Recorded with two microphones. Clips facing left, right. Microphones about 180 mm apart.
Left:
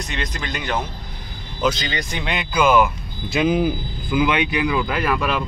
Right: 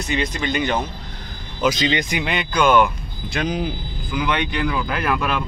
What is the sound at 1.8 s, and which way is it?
Speech, 20° right (ahead or behind).